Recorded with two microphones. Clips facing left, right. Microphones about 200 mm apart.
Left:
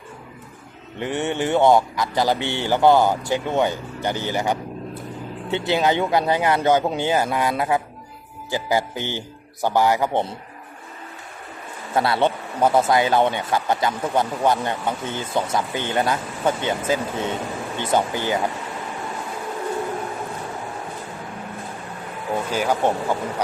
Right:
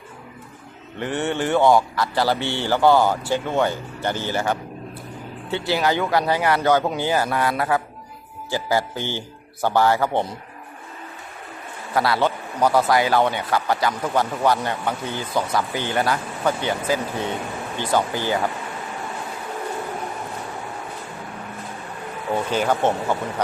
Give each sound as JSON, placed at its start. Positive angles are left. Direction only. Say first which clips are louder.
{"t": 0.9, "sound": "a man's voice", "louder": "even", "side_deg": 15}
{"t": 11.9, "sound": "a man's voice", "louder": "left 1 dB", "side_deg": 25}
{"t": 22.4, "sound": "a man's voice", "louder": "even", "side_deg": 10}